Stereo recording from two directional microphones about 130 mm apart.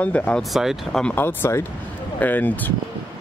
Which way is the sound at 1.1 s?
15° left (ahead or behind).